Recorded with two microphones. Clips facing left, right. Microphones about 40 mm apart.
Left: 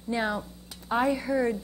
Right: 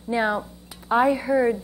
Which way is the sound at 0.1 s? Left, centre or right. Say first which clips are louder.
Right 6 dB; centre.